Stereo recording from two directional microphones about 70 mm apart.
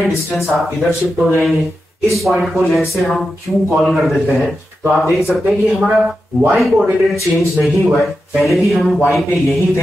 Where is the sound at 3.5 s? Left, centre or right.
Centre.